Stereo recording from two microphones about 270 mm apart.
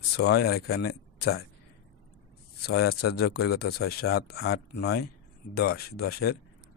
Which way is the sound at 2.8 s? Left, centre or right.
Left.